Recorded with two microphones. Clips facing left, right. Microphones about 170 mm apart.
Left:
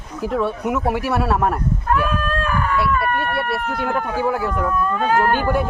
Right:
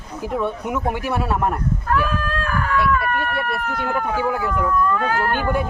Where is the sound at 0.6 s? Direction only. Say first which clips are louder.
Left 3 dB; centre (ahead or behind).